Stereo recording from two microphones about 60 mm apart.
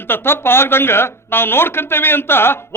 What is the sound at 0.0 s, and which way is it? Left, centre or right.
A man's voice, left.